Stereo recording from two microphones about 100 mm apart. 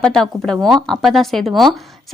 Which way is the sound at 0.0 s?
5° left (ahead or behind).